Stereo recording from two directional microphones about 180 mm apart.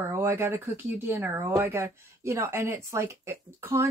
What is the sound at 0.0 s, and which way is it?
Speech, 15° right (ahead or behind).